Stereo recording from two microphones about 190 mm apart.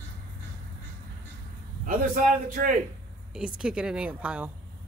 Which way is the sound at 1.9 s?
45° right (ahead or behind).